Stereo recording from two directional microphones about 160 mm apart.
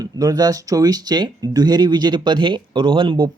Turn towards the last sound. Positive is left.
turn(degrees=-30)  # may be behind; listen again after turning